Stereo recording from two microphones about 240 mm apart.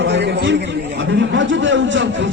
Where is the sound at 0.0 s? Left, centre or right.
Right.